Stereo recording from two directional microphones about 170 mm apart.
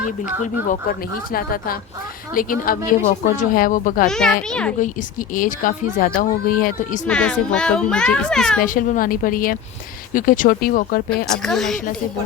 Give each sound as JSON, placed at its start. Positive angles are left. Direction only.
{"t": 0.4, "sound": "a woman's voice", "side_deg": 55}
{"t": 4.4, "sound": "a child's voice", "side_deg": 5}
{"t": 5.3, "sound": "a woman's voice", "side_deg": 55}
{"t": 7.1, "sound": "a child's voice", "side_deg": 5}
{"t": 8.6, "sound": "a woman's voice", "side_deg": 50}
{"t": 11.4, "sound": "a child's voice", "side_deg": 0}